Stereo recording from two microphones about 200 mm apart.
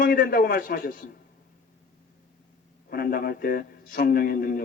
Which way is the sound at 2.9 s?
45° left (ahead or behind).